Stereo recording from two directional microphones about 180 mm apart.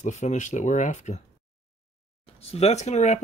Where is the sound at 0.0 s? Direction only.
40° left (ahead or behind).